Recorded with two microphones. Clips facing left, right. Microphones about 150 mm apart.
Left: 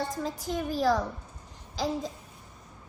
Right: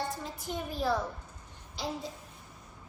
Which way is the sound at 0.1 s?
90° left.